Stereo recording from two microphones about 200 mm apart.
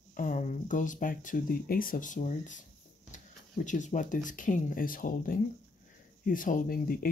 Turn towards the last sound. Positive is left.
turn(degrees=45)  # may be behind; listen again after turning